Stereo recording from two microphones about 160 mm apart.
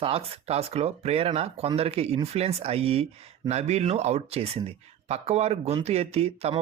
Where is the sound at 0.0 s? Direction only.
35° right (ahead or behind).